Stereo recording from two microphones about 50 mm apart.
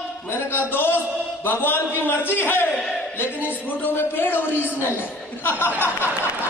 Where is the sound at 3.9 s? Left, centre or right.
Left.